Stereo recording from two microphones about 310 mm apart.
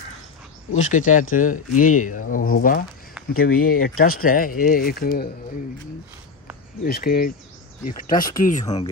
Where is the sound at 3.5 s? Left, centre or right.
Left.